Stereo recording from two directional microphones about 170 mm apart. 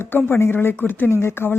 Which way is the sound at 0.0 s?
15° left (ahead or behind).